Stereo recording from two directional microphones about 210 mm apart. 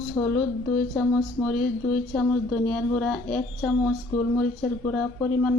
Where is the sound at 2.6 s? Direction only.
5° left (ahead or behind).